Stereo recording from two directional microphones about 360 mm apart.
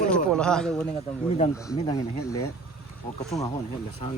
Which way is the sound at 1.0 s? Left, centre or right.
Centre.